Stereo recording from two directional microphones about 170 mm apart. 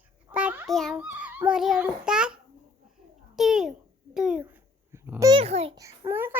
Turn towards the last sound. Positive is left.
turn(degrees=-15)  # may be behind; listen again after turning